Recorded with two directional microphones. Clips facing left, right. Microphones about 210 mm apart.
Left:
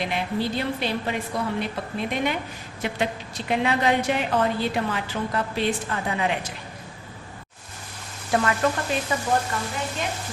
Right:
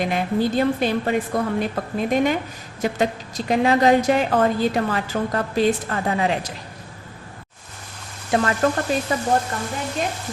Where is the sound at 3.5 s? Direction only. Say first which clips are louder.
Right 6 dB; 40° right (ahead or behind).